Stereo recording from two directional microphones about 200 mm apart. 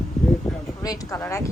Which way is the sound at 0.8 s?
15° left (ahead or behind).